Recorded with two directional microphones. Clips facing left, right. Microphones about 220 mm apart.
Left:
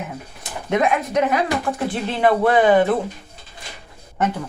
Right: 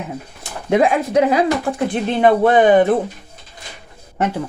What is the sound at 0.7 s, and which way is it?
Speech, 30° right (ahead or behind).